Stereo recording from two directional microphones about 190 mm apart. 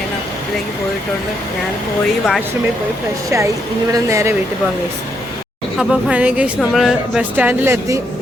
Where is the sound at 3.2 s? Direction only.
15° right (ahead or behind).